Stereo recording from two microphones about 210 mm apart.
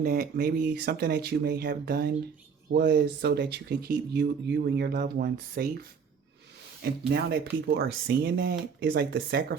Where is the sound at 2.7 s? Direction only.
55° right (ahead or behind).